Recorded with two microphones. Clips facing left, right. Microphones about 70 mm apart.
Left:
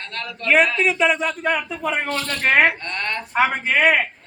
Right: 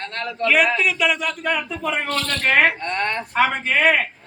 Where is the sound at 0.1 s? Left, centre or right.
Right.